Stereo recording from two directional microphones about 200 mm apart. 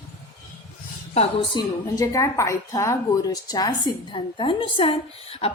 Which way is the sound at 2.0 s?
15° left (ahead or behind).